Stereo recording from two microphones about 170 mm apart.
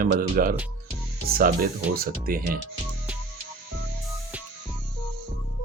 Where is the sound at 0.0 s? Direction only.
55° right (ahead or behind).